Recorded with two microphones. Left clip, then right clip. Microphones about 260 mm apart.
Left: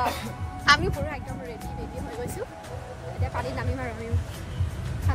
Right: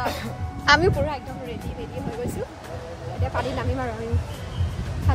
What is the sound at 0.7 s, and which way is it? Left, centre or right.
Speech, right.